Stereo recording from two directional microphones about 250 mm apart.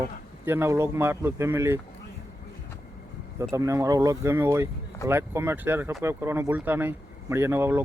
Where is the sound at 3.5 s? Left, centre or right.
Centre.